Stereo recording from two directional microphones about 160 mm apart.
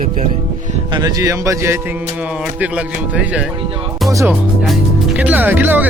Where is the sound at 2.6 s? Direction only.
5° right (ahead or behind).